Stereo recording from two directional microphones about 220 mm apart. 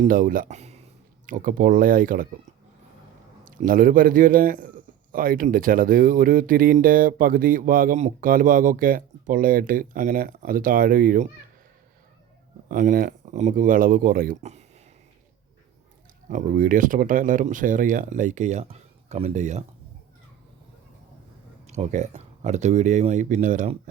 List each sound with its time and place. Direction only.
0.0 s a man's voice: 40° right (ahead or behind)
3.4 s a man's voice: 35° right (ahead or behind)
12.6 s a man's voice: 35° right (ahead or behind)
16.3 s a man's voice: 40° right (ahead or behind)
21.7 s a man's voice: 30° right (ahead or behind)